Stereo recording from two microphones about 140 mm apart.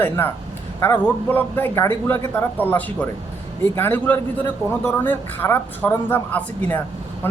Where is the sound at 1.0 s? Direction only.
15° left (ahead or behind).